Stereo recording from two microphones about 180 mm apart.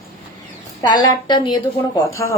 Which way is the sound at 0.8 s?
20° left (ahead or behind).